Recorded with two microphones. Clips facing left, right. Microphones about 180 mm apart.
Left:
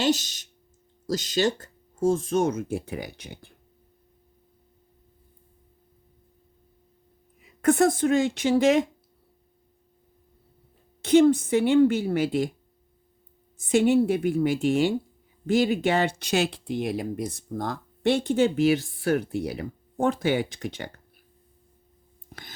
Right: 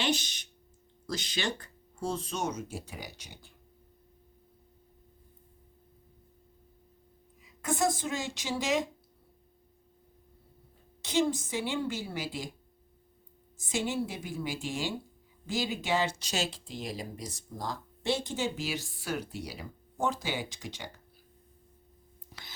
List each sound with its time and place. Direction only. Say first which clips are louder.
0.0 s speech: left 7 dB; 40° left (ahead or behind); by 3.5 s 55° left (ahead or behind)
7.4 s speech: left 10 dB; 60° left (ahead or behind)
11.0 s speech: left 11 dB; 60° left (ahead or behind)
13.6 s speech: left 12 dB; 60° left (ahead or behind)
22.3 s whispering: left 6 dB; 50° left (ahead or behind)